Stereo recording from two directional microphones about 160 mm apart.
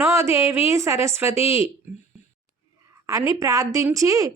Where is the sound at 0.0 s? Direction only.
15° right (ahead or behind).